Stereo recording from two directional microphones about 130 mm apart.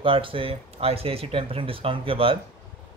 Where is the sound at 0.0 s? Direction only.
45° right (ahead or behind).